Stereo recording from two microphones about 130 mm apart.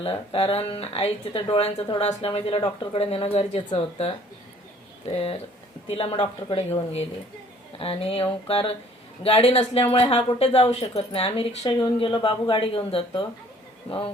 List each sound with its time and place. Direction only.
0.0 s speech: 45° left (ahead or behind)